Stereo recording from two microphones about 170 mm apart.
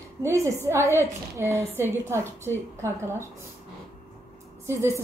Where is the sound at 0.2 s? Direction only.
15° right (ahead or behind).